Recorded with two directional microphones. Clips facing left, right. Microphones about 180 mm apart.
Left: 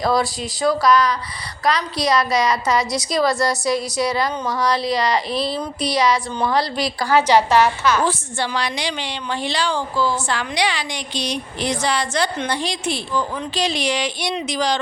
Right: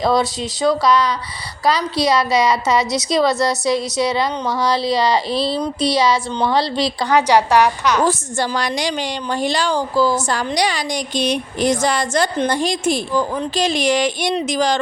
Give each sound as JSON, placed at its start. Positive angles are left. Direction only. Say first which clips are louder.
{"t": 0.8, "sound": "a woman's voice", "louder": "even", "side_deg": -25}
{"t": 3.2, "sound": "a woman's voice", "louder": "right 2 dB", "side_deg": 0}
{"t": 3.4, "sound": "a woman's voice", "louder": "right 2 dB", "side_deg": -25}
{"t": 8.0, "sound": "a woman's voice", "louder": "right 4 dB", "side_deg": -45}